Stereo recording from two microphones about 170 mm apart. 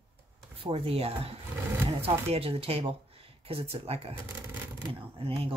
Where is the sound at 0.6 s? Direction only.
35° right (ahead or behind).